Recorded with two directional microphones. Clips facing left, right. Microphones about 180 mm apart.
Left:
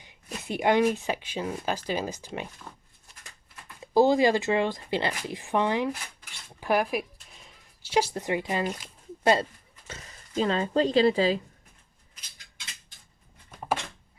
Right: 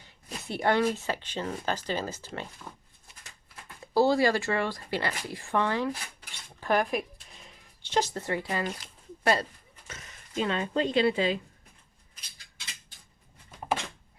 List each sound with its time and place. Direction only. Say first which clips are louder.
0.0 s speech: left 2 dB; 15° left (ahead or behind)
3.8 s speech: left 3 dB; 15° left (ahead or behind); by 11.3 s 35° left (ahead or behind)